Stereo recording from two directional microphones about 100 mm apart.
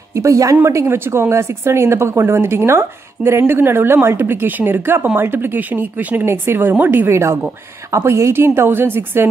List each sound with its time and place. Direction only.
0.2 s a woman's voice: 30° right (ahead or behind)